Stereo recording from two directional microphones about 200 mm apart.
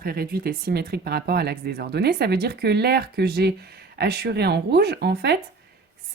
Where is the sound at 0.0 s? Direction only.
50° right (ahead or behind).